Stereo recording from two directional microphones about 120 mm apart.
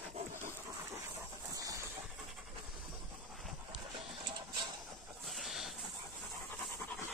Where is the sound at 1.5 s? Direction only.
30° right (ahead or behind).